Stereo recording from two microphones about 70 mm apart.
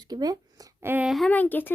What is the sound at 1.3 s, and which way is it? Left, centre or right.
Speech, left.